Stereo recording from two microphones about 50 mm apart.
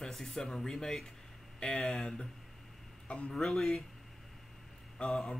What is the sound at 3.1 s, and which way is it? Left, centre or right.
Speech, left.